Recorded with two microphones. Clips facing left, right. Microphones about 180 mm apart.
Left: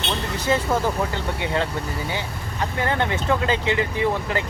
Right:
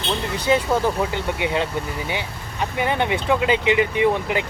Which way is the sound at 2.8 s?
15° right (ahead or behind).